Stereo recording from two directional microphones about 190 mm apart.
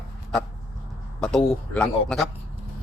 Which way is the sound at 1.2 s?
5° left (ahead or behind).